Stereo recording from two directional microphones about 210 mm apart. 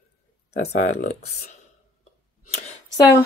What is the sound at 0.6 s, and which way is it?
Speech, 40° left (ahead or behind).